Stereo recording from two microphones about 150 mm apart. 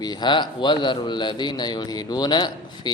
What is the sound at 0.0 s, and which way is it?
A man's voice, 30° left (ahead or behind).